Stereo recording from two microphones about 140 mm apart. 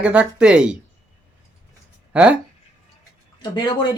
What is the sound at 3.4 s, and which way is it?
Speech, 35° left (ahead or behind).